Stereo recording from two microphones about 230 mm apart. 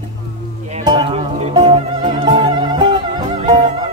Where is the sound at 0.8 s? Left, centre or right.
Right.